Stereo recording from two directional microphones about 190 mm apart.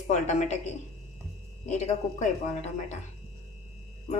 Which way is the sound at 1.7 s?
40° left (ahead or behind).